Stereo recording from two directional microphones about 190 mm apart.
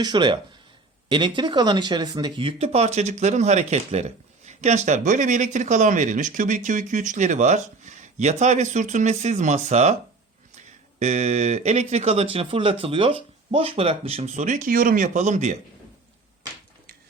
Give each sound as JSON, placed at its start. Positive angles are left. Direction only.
{"t": 0.0, "sound": "speech", "side_deg": -25}
{"t": 11.0, "sound": "speech", "side_deg": -35}